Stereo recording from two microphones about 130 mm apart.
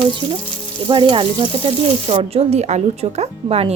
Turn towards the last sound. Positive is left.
turn(degrees=-55)  # may be behind; listen again after turning